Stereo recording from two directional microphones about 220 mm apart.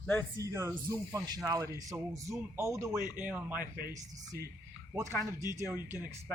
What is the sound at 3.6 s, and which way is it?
Speech, 45° right (ahead or behind).